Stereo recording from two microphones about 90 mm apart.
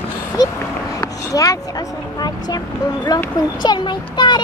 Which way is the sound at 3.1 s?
45° left (ahead or behind).